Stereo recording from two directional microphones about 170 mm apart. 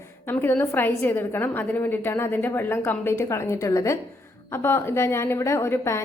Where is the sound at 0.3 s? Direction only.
15° left (ahead or behind).